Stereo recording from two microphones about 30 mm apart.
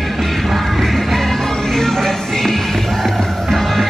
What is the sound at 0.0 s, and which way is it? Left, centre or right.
Music, centre.